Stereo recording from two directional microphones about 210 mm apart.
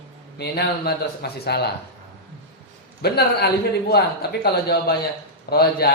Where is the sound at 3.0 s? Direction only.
50° left (ahead or behind).